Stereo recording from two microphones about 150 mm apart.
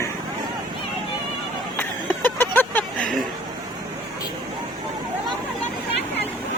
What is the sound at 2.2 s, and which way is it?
Vehicle, 15° left (ahead or behind).